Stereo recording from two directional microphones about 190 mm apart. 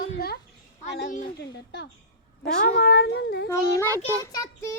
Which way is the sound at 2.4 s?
60° left (ahead or behind).